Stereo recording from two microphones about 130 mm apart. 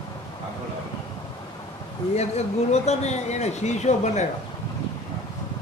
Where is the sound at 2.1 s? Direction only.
55° left (ahead or behind).